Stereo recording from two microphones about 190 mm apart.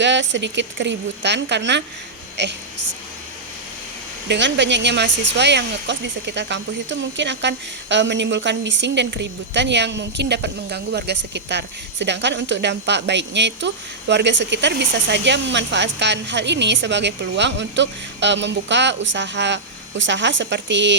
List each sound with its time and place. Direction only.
0.0 s a woman's voice: 75° right (ahead or behind)
4.3 s a woman's voice: 70° right (ahead or behind)